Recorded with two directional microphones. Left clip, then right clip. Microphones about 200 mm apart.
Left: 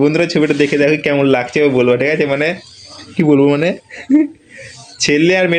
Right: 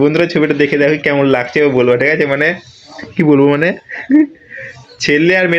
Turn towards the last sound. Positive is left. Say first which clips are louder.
# right 1 dB
turn(degrees=15)  # may be behind; listen again after turning